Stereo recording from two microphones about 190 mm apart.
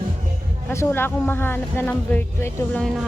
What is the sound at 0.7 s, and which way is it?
Speech, 15° left (ahead or behind).